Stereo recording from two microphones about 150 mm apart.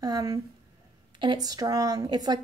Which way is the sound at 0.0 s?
25° right (ahead or behind).